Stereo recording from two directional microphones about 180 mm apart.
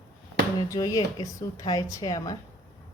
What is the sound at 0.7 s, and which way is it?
Speech, 20° left (ahead or behind).